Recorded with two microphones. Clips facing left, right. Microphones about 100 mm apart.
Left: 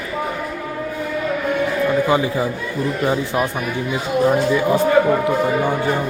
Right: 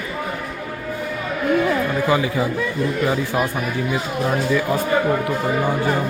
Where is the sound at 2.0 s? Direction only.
25° left (ahead or behind).